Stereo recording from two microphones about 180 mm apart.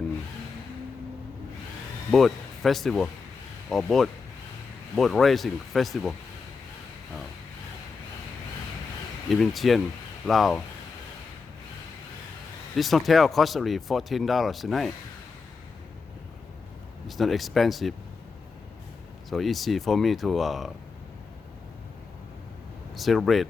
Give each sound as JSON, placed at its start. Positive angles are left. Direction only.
{"t": 2.0, "sound": "speech", "side_deg": 0}
{"t": 9.3, "sound": "speech", "side_deg": 0}
{"t": 12.7, "sound": "speech", "side_deg": 0}
{"t": 17.1, "sound": "speech", "side_deg": 0}
{"t": 19.3, "sound": "speech", "side_deg": 0}
{"t": 23.0, "sound": "speech", "side_deg": 0}